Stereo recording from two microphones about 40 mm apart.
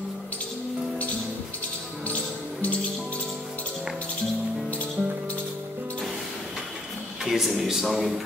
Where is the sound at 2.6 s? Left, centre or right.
Left.